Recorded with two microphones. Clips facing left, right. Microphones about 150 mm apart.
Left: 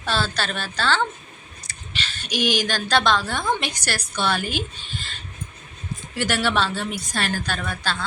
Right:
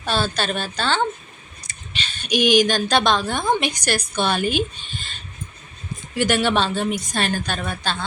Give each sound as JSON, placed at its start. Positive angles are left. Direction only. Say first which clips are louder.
{"t": 0.0, "sound": "a woman's voice", "louder": "right 2 dB", "side_deg": -15}
{"t": 6.1, "sound": "a woman's voice", "louder": "right 3 dB", "side_deg": -20}